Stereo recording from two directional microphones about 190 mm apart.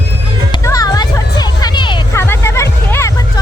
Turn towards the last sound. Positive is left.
turn(degrees=15)  # may be behind; listen again after turning